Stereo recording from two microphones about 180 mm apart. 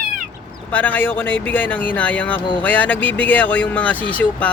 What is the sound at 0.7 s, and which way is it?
Speech, 10° left (ahead or behind).